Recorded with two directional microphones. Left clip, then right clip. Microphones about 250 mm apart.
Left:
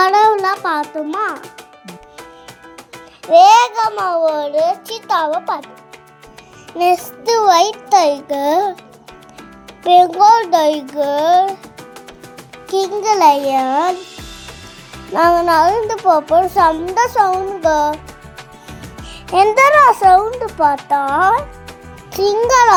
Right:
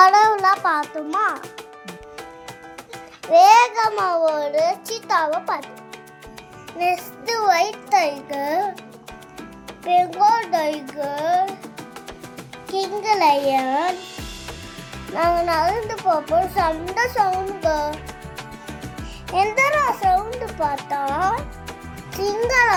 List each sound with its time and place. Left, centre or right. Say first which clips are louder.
0.0 s music: left 2 dB; centre
3.3 s a child's voice: left 4 dB; centre
6.7 s a child's voice: left 7 dB; left
9.8 s a child's voice: left 8 dB; left
12.7 s a child's voice: left 6 dB; left
15.1 s a child's voice: left 7 dB; left
19.3 s a child's voice: left 8 dB; left